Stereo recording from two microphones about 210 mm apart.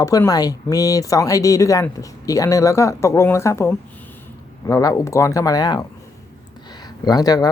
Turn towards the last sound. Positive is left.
turn(degrees=15)  # may be behind; listen again after turning